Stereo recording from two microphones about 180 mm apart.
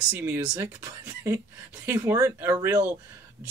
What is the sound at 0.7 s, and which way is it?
Speech, 20° right (ahead or behind).